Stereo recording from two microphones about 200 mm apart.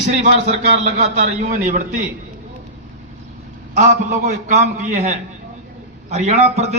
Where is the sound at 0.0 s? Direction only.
35° right (ahead or behind).